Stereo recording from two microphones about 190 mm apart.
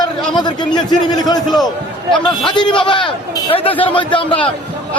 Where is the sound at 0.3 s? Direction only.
25° left (ahead or behind).